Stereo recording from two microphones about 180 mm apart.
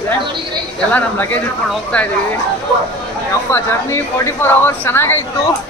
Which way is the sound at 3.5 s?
15° left (ahead or behind).